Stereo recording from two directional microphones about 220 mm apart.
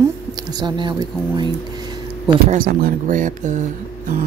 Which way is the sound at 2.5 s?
40° right (ahead or behind).